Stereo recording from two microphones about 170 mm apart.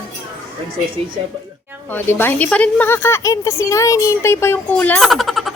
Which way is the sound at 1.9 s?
10° left (ahead or behind).